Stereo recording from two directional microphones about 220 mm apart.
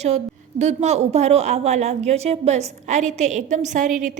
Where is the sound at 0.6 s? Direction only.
30° right (ahead or behind).